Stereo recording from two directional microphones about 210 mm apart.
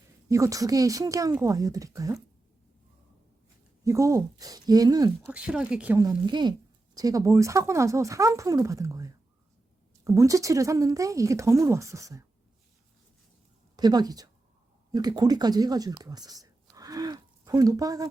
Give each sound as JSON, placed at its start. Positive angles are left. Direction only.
{"t": 0.3, "sound": "speech", "side_deg": -15}
{"t": 3.8, "sound": "speech", "side_deg": -15}
{"t": 5.3, "sound": "speech", "side_deg": -5}
{"t": 13.7, "sound": "a woman's voice", "side_deg": -20}